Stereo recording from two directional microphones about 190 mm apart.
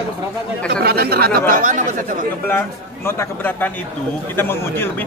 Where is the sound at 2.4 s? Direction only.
10° left (ahead or behind).